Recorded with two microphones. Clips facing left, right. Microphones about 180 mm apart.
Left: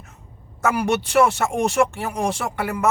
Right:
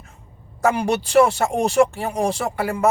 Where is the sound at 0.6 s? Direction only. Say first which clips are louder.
Right 1 dB; 30° right (ahead or behind).